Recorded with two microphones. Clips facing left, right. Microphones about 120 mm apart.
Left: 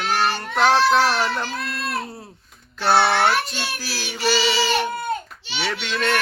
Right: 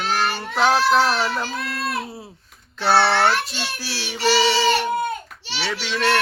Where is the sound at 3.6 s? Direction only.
5° left (ahead or behind).